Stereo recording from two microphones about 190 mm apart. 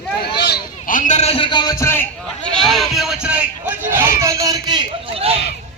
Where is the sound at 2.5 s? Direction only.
Centre (ahead or behind); by 5.4 s 30° right (ahead or behind).